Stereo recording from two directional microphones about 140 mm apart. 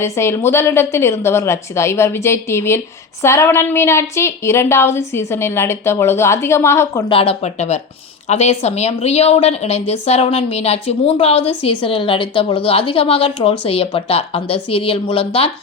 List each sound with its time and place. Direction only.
0.0 s a woman's voice: 20° left (ahead or behind)
7.1 s a woman's voice: 45° left (ahead or behind)